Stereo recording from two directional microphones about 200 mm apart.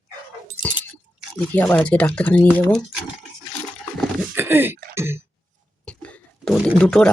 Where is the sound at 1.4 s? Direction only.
5° left (ahead or behind).